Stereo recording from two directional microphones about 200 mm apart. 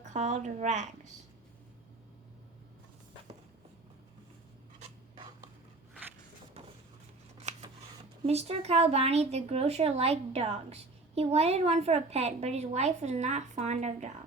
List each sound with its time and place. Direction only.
0.0 s a woman's voice: 35° right (ahead or behind)
7.5 s a sound: 35° right (ahead or behind)
8.3 s a woman's voice: 30° right (ahead or behind)